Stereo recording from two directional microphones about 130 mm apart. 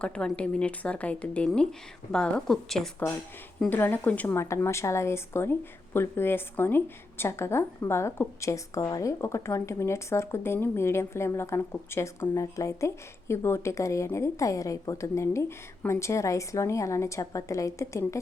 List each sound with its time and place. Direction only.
0.0 s a woman's voice: 10° left (ahead or behind)
3.7 s speech: 15° left (ahead or behind)